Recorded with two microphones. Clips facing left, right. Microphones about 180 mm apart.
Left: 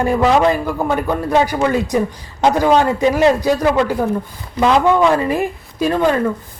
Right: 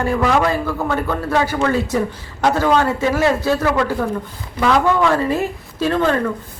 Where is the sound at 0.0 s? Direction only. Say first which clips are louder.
Left 3 dB; 20° left (ahead or behind).